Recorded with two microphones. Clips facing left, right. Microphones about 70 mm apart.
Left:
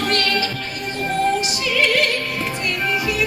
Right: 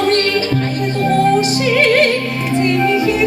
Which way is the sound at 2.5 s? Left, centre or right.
Right.